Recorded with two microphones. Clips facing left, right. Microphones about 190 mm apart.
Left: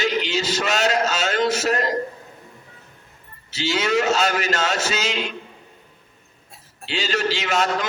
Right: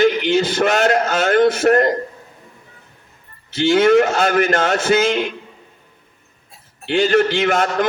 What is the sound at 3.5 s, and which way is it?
A man's voice, 55° right (ahead or behind).